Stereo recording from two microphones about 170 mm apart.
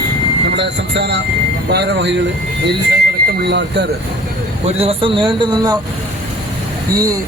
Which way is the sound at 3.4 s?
85° right.